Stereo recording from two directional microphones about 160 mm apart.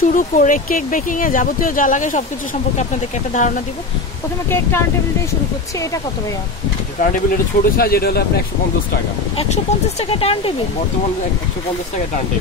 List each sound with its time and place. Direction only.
0.0 s speech: 55° left (ahead or behind)
3.3 s speech: 50° left (ahead or behind)
7.0 s speech: 60° left (ahead or behind)
9.4 s speech: 40° left (ahead or behind)